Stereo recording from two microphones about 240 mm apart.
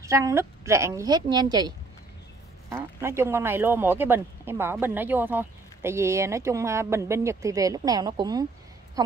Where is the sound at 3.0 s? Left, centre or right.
Centre.